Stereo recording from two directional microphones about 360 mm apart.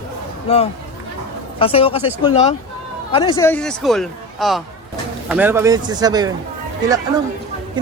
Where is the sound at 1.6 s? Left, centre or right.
Centre.